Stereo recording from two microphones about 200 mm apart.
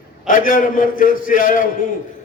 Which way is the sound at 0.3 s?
40° left (ahead or behind).